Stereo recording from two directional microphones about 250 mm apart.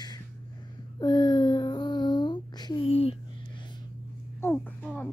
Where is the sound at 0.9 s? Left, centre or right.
Centre.